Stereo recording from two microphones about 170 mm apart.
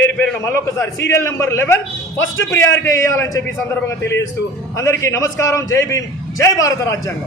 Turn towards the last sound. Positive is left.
turn(degrees=20)  # may be behind; listen again after turning